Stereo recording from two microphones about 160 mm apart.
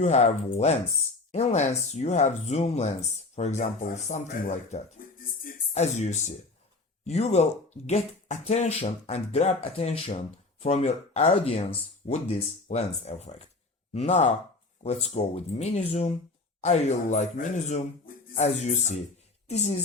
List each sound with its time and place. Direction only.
0.0 s speech: 45° left (ahead or behind); by 5.5 s 60° left (ahead or behind)
5.7 s speech: 45° left (ahead or behind)